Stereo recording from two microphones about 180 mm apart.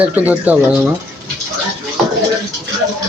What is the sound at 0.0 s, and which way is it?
Speech, 10° right (ahead or behind).